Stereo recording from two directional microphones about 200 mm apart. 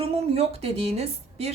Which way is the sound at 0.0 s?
30° right (ahead or behind).